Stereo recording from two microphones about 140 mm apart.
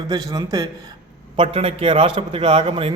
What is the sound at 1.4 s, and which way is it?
A man's voice, 45° right (ahead or behind).